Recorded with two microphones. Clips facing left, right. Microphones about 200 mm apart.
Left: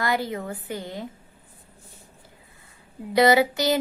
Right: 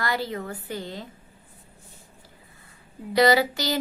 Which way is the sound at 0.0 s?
20° left (ahead or behind).